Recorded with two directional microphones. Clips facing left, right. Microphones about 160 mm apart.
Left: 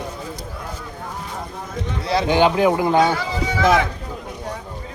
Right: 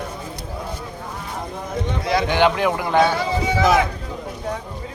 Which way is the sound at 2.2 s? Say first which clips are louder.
Left 4 dB; 15° left (ahead or behind).